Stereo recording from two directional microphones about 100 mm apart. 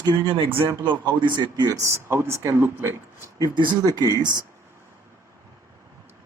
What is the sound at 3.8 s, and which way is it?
Speech, 40° right (ahead or behind).